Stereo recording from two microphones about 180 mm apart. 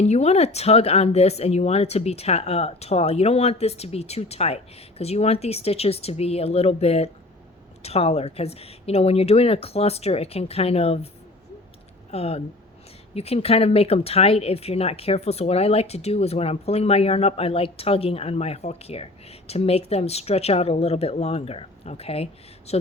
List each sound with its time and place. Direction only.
0.0 s speech: 35° left (ahead or behind)
12.1 s speech: 35° left (ahead or behind)